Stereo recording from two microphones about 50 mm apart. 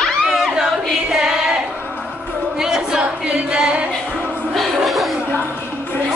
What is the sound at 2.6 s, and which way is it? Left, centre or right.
Music, centre.